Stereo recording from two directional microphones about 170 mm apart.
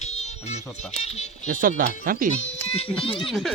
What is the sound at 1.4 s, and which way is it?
Speech, 50° right (ahead or behind).